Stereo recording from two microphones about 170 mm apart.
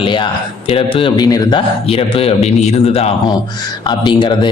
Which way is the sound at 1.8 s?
35° left (ahead or behind).